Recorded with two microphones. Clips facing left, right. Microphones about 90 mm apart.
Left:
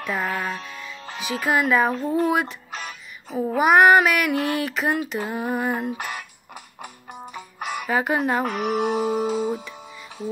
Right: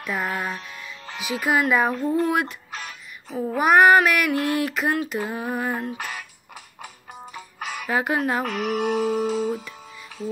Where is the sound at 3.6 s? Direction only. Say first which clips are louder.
Even; 5° left (ahead or behind).